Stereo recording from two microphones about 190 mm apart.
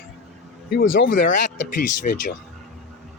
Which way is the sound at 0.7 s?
60° left (ahead or behind).